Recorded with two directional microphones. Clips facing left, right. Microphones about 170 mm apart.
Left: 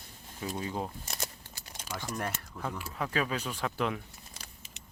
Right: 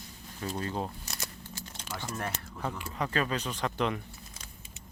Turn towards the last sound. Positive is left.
turn(degrees=5)  # may be behind; listen again after turning